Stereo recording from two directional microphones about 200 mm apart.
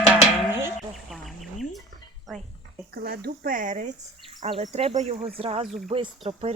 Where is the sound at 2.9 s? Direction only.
50° right (ahead or behind).